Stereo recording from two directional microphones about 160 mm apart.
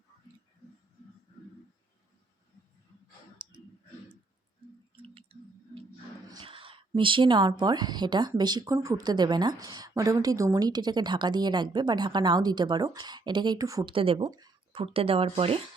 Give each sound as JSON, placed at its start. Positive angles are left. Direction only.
{"t": 3.4, "sound": "a sound", "side_deg": -30}
{"t": 5.0, "sound": "a sound", "side_deg": -35}
{"t": 6.4, "sound": "a woman's voice", "side_deg": -35}
{"t": 13.9, "sound": "speech", "side_deg": -35}
{"t": 14.3, "sound": "speech", "side_deg": -25}
{"t": 14.7, "sound": "speech", "side_deg": -35}